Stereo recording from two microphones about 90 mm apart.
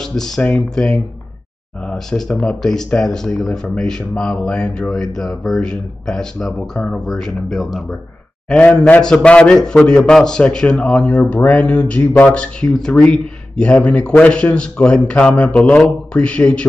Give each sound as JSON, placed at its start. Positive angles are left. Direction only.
{"t": 0.0, "sound": "a man's voice", "side_deg": 5}
{"t": 8.5, "sound": "a man's voice", "side_deg": 15}